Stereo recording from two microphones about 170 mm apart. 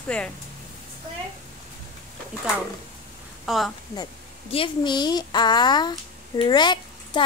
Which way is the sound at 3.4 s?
Centre (ahead or behind).